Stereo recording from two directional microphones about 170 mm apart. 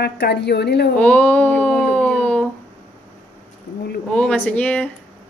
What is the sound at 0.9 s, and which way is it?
Speech, 10° left (ahead or behind).